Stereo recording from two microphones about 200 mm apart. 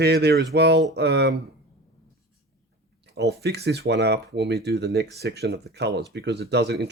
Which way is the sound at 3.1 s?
55° right (ahead or behind).